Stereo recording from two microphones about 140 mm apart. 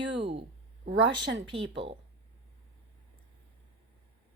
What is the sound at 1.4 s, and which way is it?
Speech, 40° right (ahead or behind).